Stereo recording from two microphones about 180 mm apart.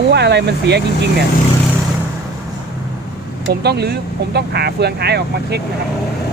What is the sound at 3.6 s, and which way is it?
Speech, 65° right (ahead or behind).